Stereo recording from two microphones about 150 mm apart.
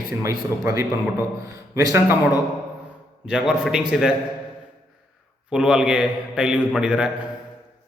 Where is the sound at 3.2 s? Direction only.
5° right (ahead or behind).